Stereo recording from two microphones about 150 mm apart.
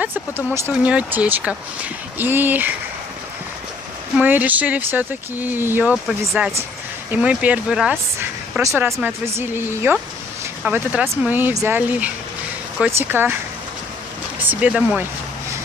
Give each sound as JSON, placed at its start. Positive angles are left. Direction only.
{"t": 0.6, "sound": "speech", "side_deg": -10}
{"t": 4.2, "sound": "speech", "side_deg": -10}
{"t": 14.5, "sound": "speech", "side_deg": -5}